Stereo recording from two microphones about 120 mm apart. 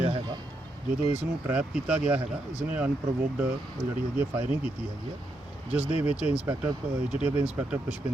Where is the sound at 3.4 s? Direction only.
10° right (ahead or behind).